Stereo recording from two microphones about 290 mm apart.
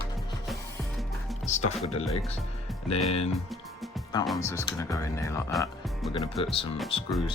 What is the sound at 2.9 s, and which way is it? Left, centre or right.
Speech, left.